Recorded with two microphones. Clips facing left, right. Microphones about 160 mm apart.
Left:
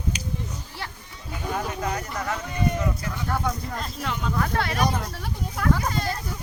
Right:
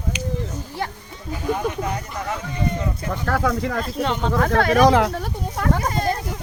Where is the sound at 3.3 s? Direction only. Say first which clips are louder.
Right 7 dB; 90° right.